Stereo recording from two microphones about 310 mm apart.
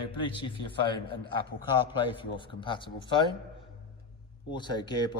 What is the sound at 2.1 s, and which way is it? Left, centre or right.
A man's voice, centre.